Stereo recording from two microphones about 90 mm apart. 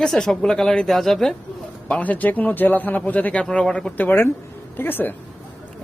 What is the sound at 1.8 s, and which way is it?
A man's voice, 15° left (ahead or behind).